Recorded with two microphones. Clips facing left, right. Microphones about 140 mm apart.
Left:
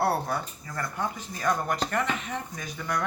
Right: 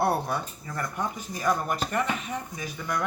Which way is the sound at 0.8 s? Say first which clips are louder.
Even; 15° right (ahead or behind).